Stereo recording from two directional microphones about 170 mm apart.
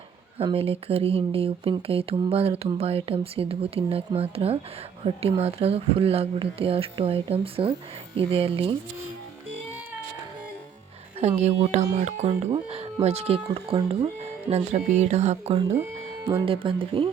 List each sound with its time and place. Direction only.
0.3 s speech: 35° right (ahead or behind)
11.2 s speech: 40° right (ahead or behind)
16.6 s speech: 30° right (ahead or behind)